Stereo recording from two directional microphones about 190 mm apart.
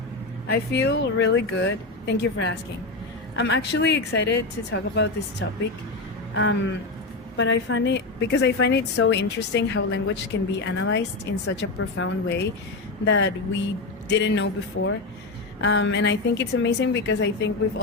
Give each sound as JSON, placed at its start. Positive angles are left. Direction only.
{"t": 0.4, "sound": "speech", "side_deg": 55}
{"t": 14.8, "sound": "speech", "side_deg": 90}
{"t": 15.6, "sound": "speech", "side_deg": 70}